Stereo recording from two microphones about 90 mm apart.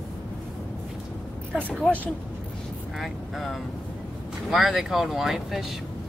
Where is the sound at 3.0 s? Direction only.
Centre (ahead or behind).